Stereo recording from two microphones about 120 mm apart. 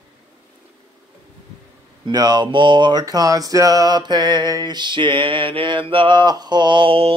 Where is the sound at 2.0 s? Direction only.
35° right (ahead or behind).